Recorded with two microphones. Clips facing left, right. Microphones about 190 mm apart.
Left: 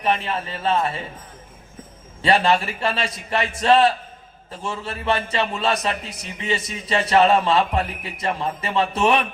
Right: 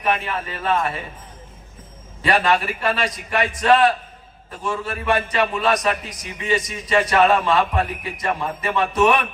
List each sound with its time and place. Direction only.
0.0 s a man's voice: 30° left (ahead or behind)
2.2 s a man's voice: 25° left (ahead or behind)